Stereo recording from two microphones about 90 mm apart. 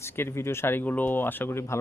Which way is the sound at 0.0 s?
30° left (ahead or behind).